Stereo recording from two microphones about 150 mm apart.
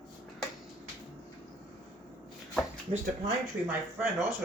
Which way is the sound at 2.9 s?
40° right (ahead or behind).